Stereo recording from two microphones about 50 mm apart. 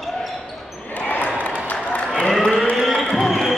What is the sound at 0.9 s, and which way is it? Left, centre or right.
Basketball bounce, left.